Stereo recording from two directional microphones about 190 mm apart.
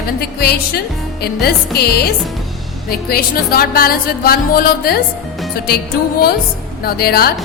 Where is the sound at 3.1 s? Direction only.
50° left (ahead or behind).